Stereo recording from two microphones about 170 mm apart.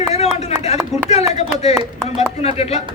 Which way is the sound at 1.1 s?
40° left (ahead or behind).